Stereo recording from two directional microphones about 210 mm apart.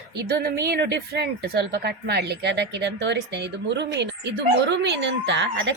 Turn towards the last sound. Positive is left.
turn(degrees=-55)  # may be behind; listen again after turning